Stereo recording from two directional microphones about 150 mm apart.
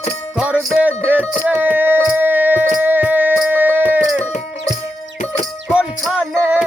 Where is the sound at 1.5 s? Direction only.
10° right (ahead or behind).